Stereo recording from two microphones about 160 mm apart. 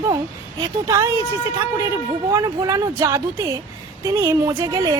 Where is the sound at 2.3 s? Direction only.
20° right (ahead or behind).